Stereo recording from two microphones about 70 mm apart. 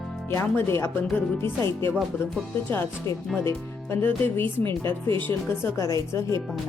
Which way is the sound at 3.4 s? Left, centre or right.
Left.